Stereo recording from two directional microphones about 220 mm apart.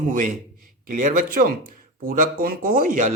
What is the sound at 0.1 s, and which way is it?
Speech, 35° right (ahead or behind).